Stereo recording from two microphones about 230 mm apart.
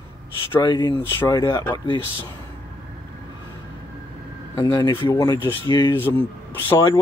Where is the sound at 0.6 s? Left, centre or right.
Centre.